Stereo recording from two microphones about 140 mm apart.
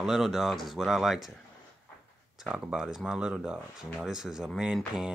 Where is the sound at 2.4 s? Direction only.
5° right (ahead or behind).